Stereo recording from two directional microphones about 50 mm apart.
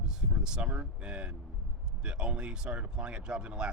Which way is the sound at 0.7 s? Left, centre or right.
Right.